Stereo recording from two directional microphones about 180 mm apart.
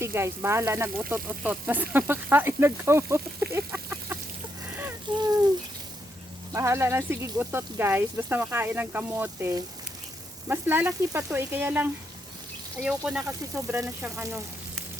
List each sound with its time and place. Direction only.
0.0 s speech: 15° right (ahead or behind)
5.1 s speech: 25° right (ahead or behind)
6.5 s speech: 15° right (ahead or behind)